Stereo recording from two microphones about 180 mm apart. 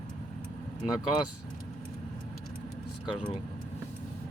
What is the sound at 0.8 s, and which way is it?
Speech, 20° left (ahead or behind).